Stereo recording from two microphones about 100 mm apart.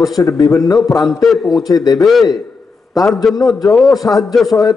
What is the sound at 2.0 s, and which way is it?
A man's voice, centre (ahead or behind).